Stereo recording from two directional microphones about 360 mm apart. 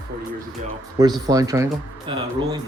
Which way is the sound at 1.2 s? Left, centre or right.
Centre.